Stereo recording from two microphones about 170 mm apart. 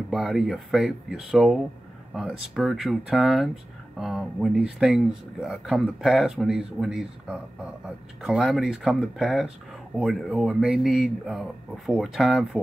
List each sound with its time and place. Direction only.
0.1 s speech: centre (ahead or behind)